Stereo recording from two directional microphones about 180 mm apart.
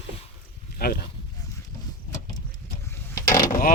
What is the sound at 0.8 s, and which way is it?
Speech, 60° left (ahead or behind).